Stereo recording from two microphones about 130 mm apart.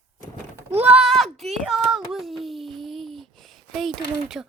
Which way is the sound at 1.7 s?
Centre (ahead or behind).